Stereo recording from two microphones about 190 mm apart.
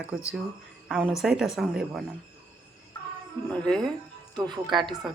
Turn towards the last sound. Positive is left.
turn(degrees=-25)  # may be behind; listen again after turning